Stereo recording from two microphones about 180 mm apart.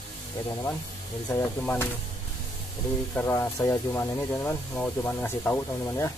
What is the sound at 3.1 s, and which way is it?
Speech, 15° left (ahead or behind).